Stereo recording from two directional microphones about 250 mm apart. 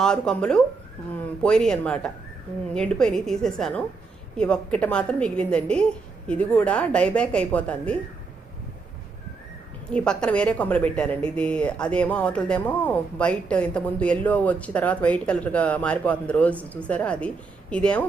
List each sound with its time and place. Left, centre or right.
0.0 s a woman's voice: centre
9.9 s a woman's voice: centre